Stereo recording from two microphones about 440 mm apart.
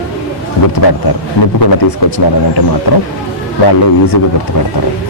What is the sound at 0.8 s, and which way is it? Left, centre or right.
Speech, left.